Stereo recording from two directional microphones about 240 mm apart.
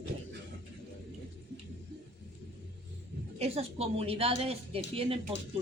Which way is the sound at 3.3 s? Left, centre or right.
Right.